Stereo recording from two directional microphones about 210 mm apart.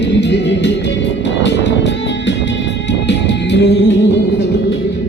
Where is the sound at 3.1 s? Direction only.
55° left (ahead or behind).